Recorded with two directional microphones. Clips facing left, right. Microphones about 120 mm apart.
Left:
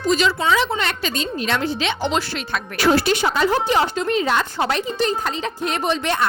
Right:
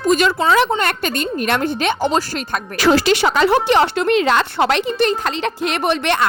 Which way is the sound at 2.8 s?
90° right.